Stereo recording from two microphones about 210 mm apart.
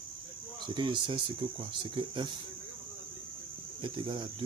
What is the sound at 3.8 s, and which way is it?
Speech, 25° right (ahead or behind).